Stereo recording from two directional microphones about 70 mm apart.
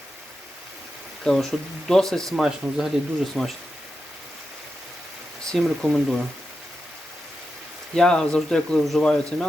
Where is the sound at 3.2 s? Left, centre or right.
Centre.